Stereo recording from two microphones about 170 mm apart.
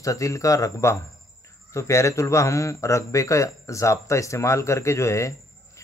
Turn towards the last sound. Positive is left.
turn(degrees=15)  # may be behind; listen again after turning